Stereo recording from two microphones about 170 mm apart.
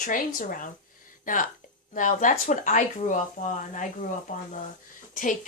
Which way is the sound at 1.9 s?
50° left (ahead or behind).